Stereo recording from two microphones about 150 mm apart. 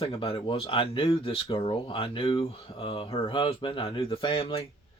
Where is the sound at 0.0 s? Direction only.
40° left (ahead or behind).